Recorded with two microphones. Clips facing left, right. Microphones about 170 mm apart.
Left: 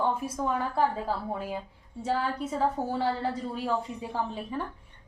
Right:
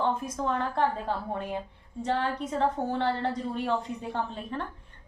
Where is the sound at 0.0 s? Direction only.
10° left (ahead or behind).